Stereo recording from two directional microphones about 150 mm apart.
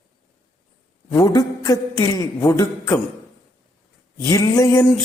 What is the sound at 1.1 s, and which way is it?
A man's voice, 25° left (ahead or behind).